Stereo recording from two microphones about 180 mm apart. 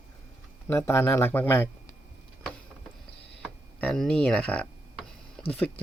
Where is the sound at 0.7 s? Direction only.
15° left (ahead or behind).